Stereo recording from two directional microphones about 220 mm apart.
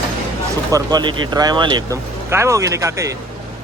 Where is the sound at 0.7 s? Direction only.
20° right (ahead or behind).